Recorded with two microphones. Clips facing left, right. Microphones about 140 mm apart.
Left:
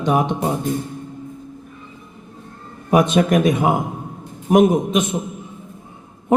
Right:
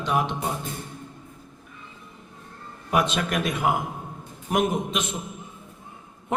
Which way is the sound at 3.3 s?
45° left (ahead or behind).